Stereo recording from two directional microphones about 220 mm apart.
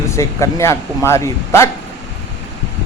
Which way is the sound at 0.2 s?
15° left (ahead or behind).